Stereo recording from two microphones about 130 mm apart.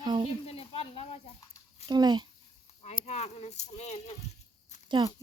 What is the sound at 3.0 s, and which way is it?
Speech, 55° left (ahead or behind).